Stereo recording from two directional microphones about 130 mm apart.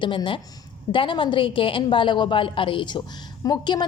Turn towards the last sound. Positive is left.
turn(degrees=35)  # may be behind; listen again after turning